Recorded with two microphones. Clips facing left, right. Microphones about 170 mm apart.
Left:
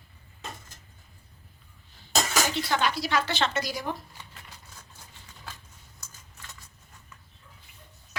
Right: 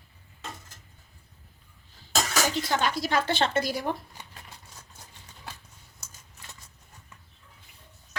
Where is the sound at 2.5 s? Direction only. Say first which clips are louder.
Even; 45° right (ahead or behind).